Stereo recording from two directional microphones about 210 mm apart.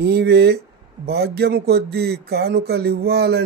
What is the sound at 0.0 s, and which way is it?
Speech, 50° right (ahead or behind).